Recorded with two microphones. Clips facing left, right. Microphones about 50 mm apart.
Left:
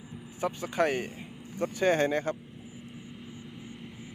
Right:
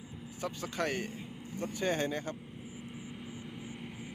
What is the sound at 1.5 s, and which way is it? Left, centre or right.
Speech, left.